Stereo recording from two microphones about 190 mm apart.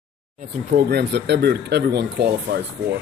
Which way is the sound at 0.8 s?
60° right (ahead or behind).